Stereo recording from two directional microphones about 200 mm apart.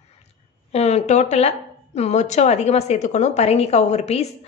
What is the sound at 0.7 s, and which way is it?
Speech, 35° left (ahead or behind).